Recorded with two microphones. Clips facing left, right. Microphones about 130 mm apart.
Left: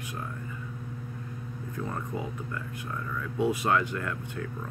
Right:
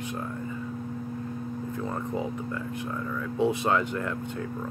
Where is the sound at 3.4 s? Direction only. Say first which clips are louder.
Right 1 dB; 25° right (ahead or behind).